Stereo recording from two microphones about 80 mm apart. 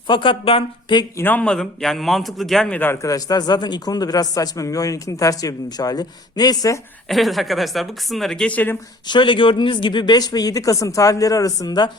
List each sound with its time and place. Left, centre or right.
0.1 s speech: left
1.2 s speech: left
1.5 s speech: centre
2.7 s speech: left
3.0 s a man's voice: left
7.1 s speech: centre
8.4 s speech: left
9.0 s speech: left